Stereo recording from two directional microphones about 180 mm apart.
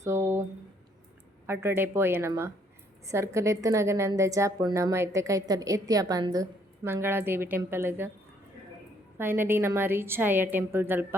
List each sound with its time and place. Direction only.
0.0 s a sound: 15° right (ahead or behind)
1.5 s a woman's voice: 10° right (ahead or behind)
9.1 s a woman's voice: 10° right (ahead or behind)